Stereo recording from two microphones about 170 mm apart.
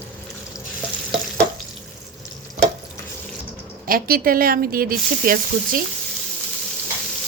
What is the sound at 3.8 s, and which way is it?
Speech, 60° right (ahead or behind).